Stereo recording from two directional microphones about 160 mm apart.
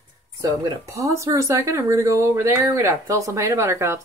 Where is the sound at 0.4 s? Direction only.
20° right (ahead or behind).